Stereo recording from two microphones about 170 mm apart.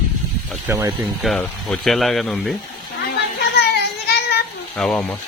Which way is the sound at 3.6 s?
70° left (ahead or behind).